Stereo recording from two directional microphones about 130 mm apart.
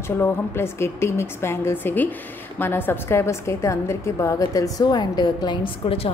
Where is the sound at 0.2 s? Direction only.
20° left (ahead or behind).